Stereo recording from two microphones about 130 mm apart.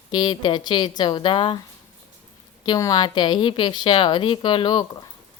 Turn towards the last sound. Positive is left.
turn(degrees=35)  # may be behind; listen again after turning